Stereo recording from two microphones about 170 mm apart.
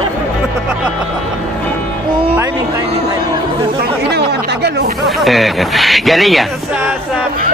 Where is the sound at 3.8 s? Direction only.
75° right (ahead or behind).